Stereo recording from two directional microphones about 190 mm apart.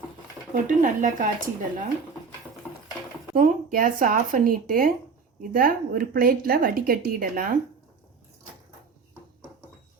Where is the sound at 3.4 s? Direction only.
45° right (ahead or behind).